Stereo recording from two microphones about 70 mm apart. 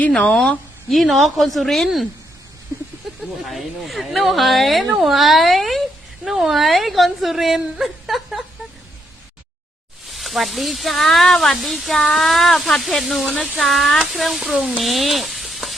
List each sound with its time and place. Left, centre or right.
0.0 s speech: centre
3.5 s speech: centre
10.1 s speech: centre
14.2 s stir: centre